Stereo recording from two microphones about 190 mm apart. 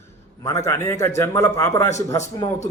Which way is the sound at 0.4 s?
15° left (ahead or behind).